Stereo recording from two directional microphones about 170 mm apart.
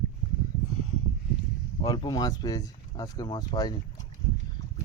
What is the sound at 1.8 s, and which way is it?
Speech, 25° left (ahead or behind).